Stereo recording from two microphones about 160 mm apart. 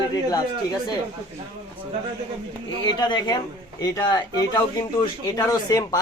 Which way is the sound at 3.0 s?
25° left (ahead or behind).